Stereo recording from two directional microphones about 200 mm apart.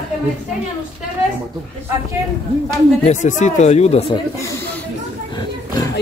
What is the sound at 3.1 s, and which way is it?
Speech, 35° left (ahead or behind).